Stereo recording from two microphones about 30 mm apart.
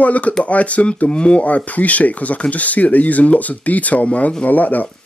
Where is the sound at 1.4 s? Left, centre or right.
Left.